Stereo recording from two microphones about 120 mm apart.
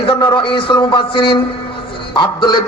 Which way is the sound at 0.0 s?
40° left (ahead or behind).